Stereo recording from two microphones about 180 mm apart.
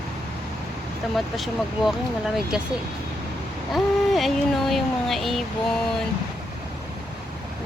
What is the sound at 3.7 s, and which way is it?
Speech, centre (ahead or behind).